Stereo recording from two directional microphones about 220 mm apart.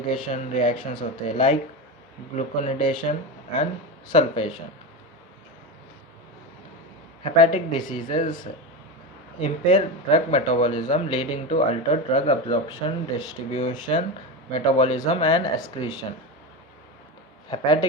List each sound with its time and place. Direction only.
0.1 s speech: 25° left (ahead or behind)
2.9 s speech: 20° left (ahead or behind)
7.3 s speech: 25° left (ahead or behind)
9.4 s speech: 30° left (ahead or behind)
17.5 s speech: 20° left (ahead or behind)